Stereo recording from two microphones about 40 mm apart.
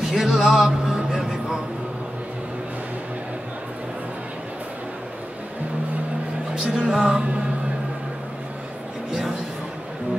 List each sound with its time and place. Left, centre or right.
0.0 s music: centre
6.5 s music: centre